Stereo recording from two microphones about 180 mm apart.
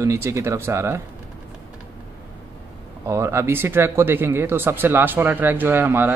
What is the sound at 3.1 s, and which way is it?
Speech, 15° right (ahead or behind).